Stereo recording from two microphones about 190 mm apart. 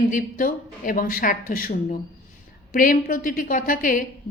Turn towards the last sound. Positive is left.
turn(degrees=45)  # may be behind; listen again after turning